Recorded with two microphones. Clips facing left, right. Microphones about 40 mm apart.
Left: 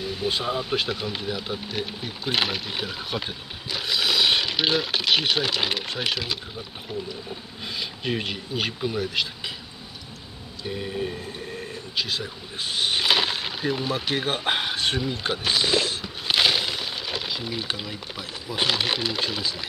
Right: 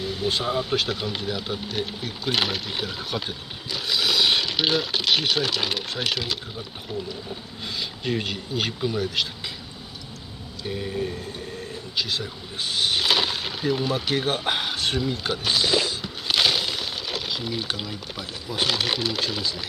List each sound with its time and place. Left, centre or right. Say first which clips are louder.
0.0 s a sound: right 1 dB; centre
0.4 s speech: right 1 dB; centre
7.6 s speech: even; centre
10.7 s speech: right 1 dB; centre
11.0 s train: right 1 dB; centre
12.0 s speech: right 1 dB; centre
12.8 s a sound: even; centre
14.2 s speech: even; centre
16.0 s crumpling: left 1 dB; centre